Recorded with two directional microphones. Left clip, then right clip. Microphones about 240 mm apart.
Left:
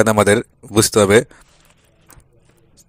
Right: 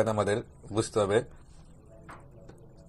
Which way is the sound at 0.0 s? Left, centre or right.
Left.